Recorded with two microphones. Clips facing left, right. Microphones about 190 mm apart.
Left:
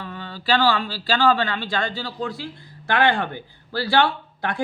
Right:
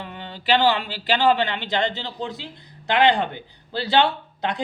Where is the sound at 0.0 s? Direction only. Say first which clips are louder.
Left 1 dB; 20° right (ahead or behind).